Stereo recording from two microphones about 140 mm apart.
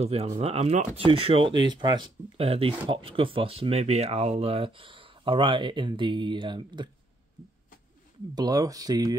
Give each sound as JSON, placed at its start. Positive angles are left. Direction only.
{"t": 0.0, "sound": "speech", "side_deg": -45}
{"t": 8.4, "sound": "speech", "side_deg": -25}